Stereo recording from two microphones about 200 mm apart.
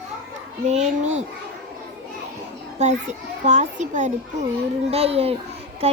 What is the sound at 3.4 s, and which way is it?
A child's voice, 35° right (ahead or behind).